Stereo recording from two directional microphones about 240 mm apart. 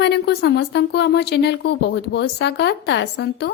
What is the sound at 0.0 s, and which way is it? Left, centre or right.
A woman's voice, left.